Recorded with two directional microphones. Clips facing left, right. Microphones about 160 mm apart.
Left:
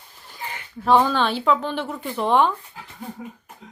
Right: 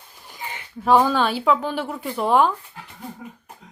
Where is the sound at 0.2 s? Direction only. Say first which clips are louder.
Even; 10° right (ahead or behind).